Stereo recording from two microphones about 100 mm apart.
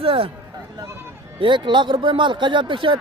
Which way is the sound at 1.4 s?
55° right (ahead or behind).